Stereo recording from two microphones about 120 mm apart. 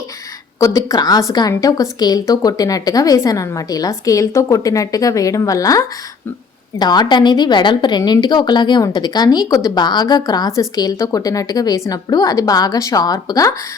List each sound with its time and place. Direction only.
0.6 s a woman's voice: 25° left (ahead or behind)